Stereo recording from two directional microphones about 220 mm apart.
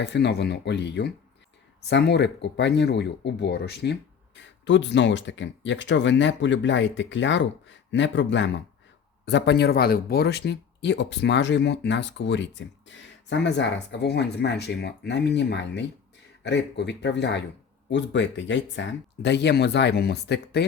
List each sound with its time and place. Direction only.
0.0 s speech: 50° left (ahead or behind)